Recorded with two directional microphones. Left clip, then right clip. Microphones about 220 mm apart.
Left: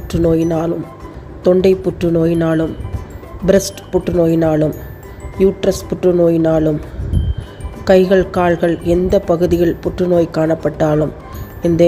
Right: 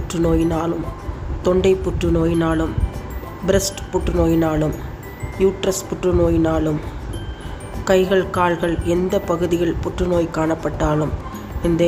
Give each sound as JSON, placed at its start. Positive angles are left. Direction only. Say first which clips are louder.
{"t": 0.1, "sound": "speech", "louder": "left 4 dB", "side_deg": 15}
{"t": 7.9, "sound": "speech", "louder": "left 5 dB", "side_deg": 20}